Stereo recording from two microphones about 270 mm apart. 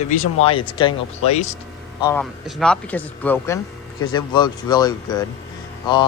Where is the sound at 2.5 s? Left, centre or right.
Centre.